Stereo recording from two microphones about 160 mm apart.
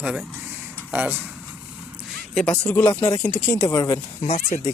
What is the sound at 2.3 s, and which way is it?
Speech, 5° left (ahead or behind).